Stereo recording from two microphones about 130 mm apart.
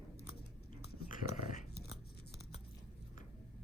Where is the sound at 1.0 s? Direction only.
70° left (ahead or behind).